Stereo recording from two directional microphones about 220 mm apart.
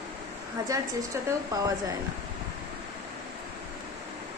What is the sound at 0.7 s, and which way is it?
Speech, 15° right (ahead or behind).